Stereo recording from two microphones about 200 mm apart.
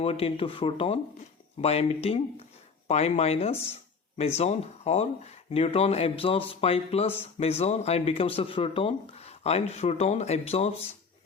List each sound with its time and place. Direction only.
0.0 s speech: 30° left (ahead or behind)